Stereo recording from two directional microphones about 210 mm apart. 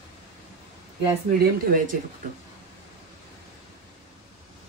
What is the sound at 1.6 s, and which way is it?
Speech, 40° right (ahead or behind).